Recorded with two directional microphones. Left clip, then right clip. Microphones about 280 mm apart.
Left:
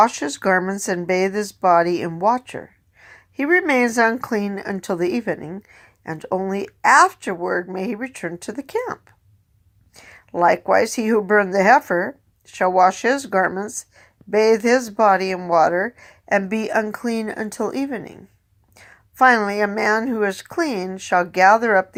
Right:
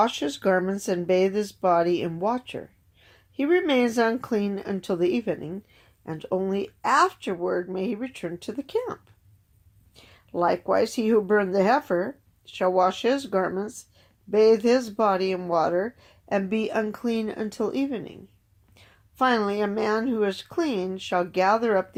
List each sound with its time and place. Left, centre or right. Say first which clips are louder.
0.0 s speech: left 6 dB; centre